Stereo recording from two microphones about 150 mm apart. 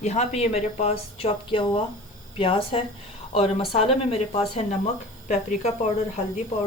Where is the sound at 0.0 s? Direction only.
45° left (ahead or behind).